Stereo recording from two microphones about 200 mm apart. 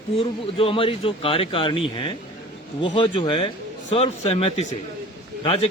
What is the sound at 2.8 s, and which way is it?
A man's voice, 25° left (ahead or behind).